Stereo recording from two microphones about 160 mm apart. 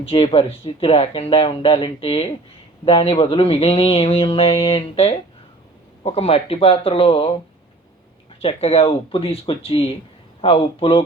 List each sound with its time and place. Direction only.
0.0 s speech: 35° left (ahead or behind)
8.4 s speech: 35° left (ahead or behind)